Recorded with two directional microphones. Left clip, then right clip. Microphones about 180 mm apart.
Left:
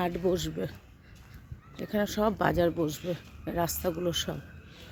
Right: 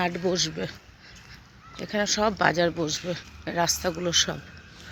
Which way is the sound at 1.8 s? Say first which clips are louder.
Right 4 dB; 25° left (ahead or behind).